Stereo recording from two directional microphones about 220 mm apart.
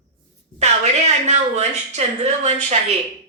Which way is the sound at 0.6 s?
30° right (ahead or behind).